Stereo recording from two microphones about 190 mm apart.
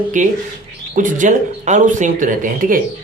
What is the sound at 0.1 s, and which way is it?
Speech, 40° right (ahead or behind).